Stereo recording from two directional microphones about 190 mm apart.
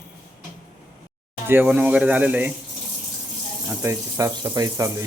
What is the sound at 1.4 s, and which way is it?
A man's voice, 10° right (ahead or behind).